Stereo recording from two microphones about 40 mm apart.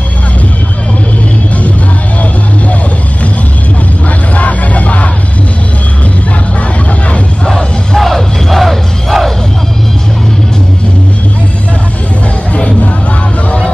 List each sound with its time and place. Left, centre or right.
4.4 s music: left
7.4 s music: centre
8.0 s music: centre
12.5 s music: left